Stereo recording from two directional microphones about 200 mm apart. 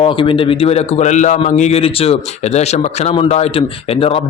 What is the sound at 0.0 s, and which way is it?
A man's voice, 25° left (ahead or behind).